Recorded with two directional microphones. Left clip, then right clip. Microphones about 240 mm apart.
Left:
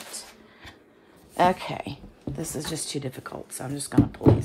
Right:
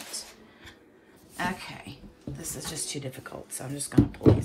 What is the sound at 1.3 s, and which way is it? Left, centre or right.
A woman's voice, left.